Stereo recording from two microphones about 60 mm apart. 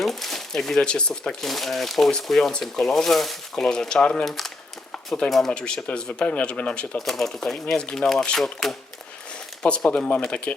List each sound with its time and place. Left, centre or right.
0.0 s speech: centre
5.5 s speech: centre
7.0 s speech: centre